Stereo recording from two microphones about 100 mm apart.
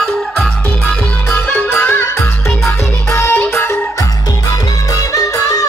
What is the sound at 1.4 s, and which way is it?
Music, 20° left (ahead or behind).